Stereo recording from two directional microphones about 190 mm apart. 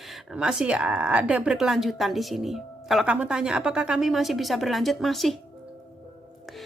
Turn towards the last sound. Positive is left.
turn(degrees=0)  # may be behind; listen again after turning